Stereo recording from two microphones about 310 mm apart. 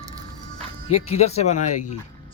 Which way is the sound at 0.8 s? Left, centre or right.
Centre.